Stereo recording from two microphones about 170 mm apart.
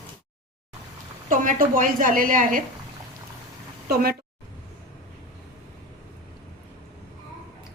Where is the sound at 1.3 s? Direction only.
55° right (ahead or behind).